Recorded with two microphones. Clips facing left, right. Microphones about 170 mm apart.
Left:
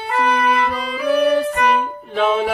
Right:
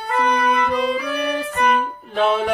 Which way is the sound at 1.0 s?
Centre (ahead or behind).